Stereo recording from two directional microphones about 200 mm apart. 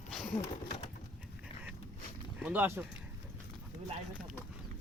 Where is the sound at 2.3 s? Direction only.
5° right (ahead or behind).